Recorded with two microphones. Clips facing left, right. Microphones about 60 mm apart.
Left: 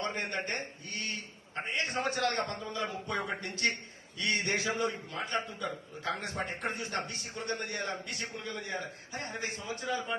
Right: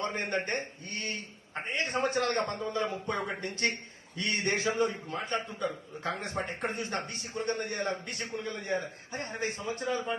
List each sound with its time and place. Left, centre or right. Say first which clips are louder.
0.0 s a man's voice: right 3 dB; right